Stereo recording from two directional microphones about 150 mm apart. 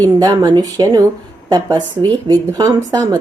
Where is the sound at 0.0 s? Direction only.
25° right (ahead or behind).